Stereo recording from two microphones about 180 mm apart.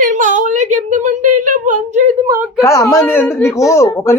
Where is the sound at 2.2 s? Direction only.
15° right (ahead or behind).